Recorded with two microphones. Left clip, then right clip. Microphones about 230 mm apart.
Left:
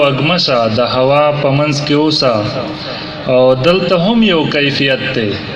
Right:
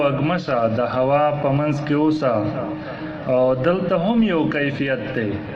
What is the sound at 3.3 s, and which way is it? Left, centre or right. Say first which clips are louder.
A man's voice: left 8 dB; left.